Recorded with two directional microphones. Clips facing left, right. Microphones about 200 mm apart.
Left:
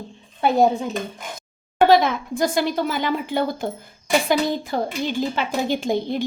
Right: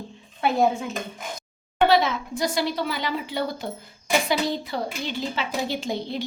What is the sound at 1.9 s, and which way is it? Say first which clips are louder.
Speech: left 4 dB; 50° left (ahead or behind).